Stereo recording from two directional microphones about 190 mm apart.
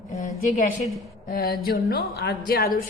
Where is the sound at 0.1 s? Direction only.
40° left (ahead or behind).